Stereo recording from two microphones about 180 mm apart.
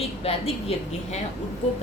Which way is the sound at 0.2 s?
35° left (ahead or behind).